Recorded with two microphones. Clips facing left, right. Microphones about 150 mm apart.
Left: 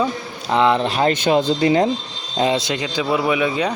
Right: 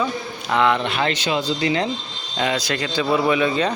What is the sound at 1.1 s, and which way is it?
Speech, 50° left (ahead or behind).